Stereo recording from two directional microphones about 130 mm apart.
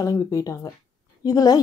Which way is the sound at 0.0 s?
25° left (ahead or behind).